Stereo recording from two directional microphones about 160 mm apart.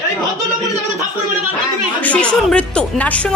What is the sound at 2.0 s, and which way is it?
A woman's voice, 10° left (ahead or behind).